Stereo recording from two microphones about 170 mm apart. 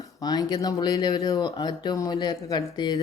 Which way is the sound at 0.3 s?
25° left (ahead or behind).